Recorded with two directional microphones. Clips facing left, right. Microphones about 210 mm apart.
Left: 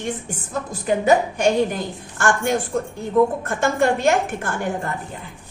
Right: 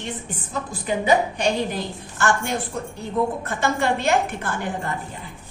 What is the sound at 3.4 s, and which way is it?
A woman's voice, 50° left (ahead or behind).